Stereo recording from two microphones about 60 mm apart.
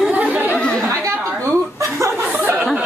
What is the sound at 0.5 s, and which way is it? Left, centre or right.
Speech, centre.